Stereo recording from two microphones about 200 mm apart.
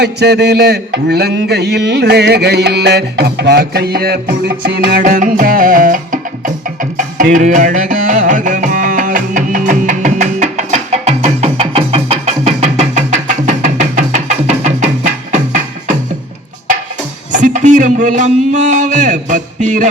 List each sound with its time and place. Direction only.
0.0 s a sound: 55° right (ahead or behind); by 6.5 s 40° right (ahead or behind)
6.9 s music: 40° right (ahead or behind)
17.3 s a man's voice: 40° right (ahead or behind)